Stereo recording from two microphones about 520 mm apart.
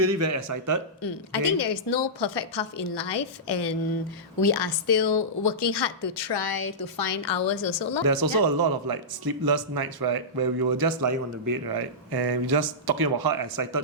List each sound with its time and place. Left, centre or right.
0.0 s speech: right
1.0 s a woman's voice: left
8.0 s speech: right